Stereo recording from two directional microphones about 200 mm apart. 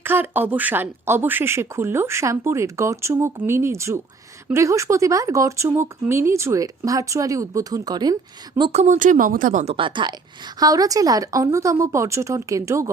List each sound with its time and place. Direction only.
0.0 s speech: 10° right (ahead or behind); by 9.7 s 40° right (ahead or behind)
9.7 s speech: 25° right (ahead or behind)